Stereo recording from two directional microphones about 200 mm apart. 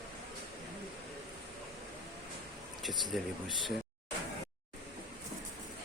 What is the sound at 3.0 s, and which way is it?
Speech, centre (ahead or behind).